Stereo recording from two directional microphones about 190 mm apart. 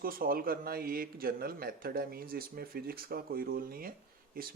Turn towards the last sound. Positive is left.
turn(degrees=-50)  # may be behind; listen again after turning